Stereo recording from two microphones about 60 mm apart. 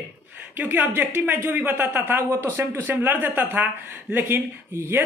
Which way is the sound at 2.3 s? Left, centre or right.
Right.